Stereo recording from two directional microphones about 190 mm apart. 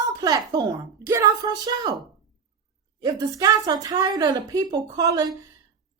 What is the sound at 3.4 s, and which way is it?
A woman's voice, 20° right (ahead or behind).